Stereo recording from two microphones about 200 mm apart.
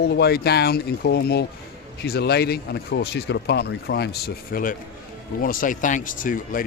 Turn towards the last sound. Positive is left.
turn(degrees=40)  # may be behind; listen again after turning